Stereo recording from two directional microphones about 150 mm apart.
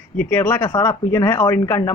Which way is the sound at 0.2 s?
15° left (ahead or behind).